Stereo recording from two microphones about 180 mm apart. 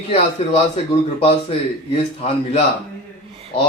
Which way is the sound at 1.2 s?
35° left (ahead or behind).